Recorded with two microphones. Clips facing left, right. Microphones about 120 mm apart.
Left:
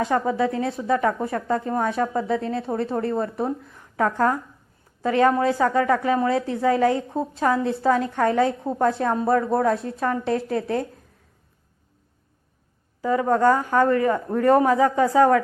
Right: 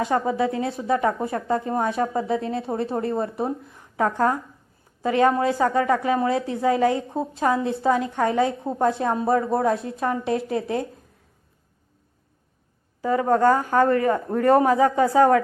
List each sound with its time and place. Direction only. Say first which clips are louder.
0.0 s a woman's voice: even; 25° right (ahead or behind)
13.0 s speech: even; 30° right (ahead or behind)